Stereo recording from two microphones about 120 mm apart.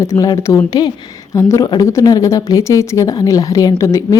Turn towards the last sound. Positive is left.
turn(degrees=25)  # may be behind; listen again after turning